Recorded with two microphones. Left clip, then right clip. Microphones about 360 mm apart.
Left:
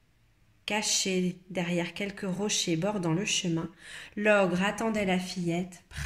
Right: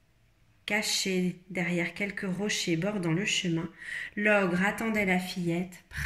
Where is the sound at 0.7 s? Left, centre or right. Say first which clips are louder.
Even; centre.